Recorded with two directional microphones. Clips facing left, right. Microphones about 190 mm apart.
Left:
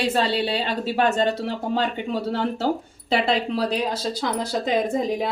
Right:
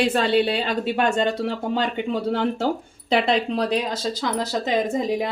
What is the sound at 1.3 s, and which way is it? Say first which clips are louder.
Speech: right 1 dB; centre (ahead or behind).